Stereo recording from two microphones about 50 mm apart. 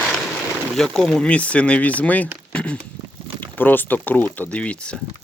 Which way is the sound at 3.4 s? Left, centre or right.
Left.